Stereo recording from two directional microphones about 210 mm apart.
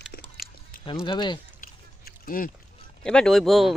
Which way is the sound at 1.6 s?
45° left (ahead or behind).